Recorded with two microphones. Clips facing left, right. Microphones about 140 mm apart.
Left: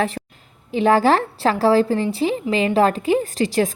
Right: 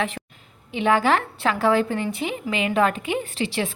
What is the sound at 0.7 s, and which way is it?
A woman's voice, 40° left (ahead or behind).